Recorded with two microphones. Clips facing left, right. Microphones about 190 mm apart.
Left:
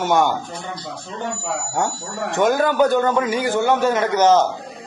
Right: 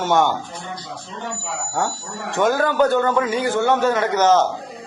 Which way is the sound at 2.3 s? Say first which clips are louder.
Left 1 dB; 20° left (ahead or behind).